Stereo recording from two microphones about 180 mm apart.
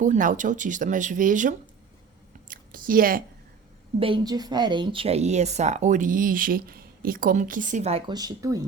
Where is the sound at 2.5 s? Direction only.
50° right (ahead or behind).